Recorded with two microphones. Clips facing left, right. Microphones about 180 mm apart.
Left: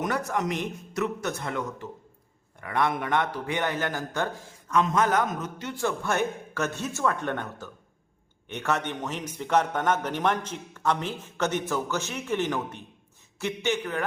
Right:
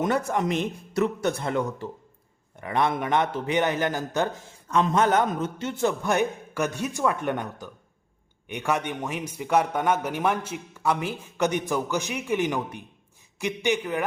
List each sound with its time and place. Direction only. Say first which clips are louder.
0.0 s a man's voice: right 3 dB; 25° right (ahead or behind)
4.7 s a man's voice: right 2 dB; 30° right (ahead or behind); by 14.0 s 15° right (ahead or behind)